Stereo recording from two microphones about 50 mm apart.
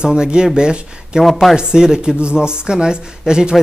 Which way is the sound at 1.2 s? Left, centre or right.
Centre.